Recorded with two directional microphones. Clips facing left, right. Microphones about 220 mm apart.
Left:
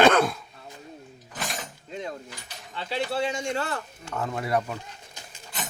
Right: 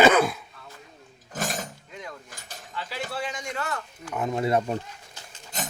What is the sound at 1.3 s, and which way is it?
Pulleys, 45° right (ahead or behind).